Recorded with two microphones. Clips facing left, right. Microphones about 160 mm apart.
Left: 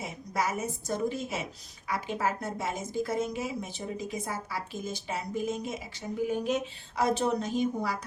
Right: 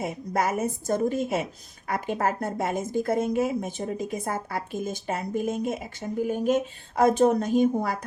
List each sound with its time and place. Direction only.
0.0 s a woman's voice: 55° right (ahead or behind)